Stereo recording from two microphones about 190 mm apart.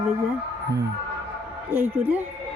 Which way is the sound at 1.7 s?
10° right (ahead or behind).